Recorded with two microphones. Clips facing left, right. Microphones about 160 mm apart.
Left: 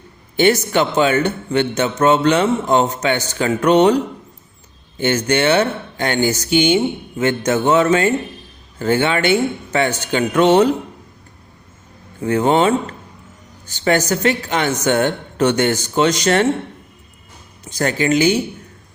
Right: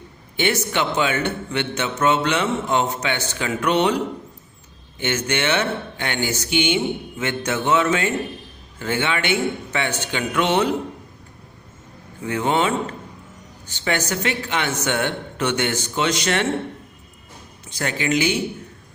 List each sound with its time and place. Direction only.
0.3 s a man's voice: 40° left (ahead or behind)
4.9 s a man's voice: 40° left (ahead or behind)
12.2 s a man's voice: 40° left (ahead or behind)
17.7 s a man's voice: 40° left (ahead or behind)